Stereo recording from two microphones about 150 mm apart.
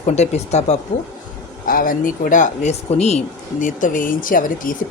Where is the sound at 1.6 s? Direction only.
70° left (ahead or behind).